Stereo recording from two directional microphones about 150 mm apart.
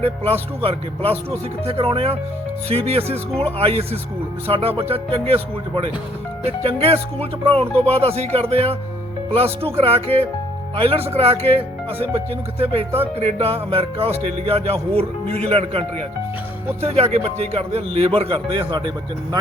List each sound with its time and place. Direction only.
0.6 s speech: 40° right (ahead or behind)